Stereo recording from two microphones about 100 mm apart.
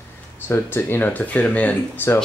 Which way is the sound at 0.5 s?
25° left (ahead or behind).